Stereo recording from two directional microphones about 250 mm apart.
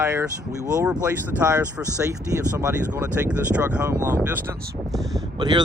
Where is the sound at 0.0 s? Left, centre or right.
Centre.